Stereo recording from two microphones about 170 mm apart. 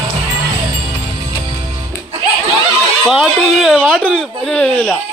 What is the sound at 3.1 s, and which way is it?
A man's voice, centre (ahead or behind).